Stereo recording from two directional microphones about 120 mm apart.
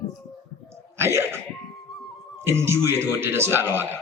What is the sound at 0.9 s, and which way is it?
Speech, 20° right (ahead or behind).